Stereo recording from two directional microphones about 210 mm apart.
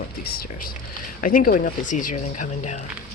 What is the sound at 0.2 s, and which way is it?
Speech, 45° left (ahead or behind).